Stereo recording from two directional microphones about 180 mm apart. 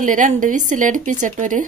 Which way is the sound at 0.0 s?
45° right (ahead or behind).